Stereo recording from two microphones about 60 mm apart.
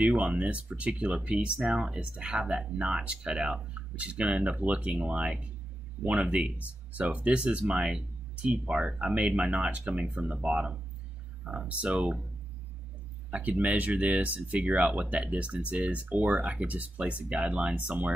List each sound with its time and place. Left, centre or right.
0.0 s speech: right
13.3 s speech: right